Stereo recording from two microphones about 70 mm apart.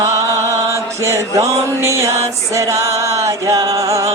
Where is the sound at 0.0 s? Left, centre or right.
Right.